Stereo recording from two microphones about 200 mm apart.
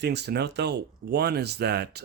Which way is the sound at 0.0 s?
55° right (ahead or behind).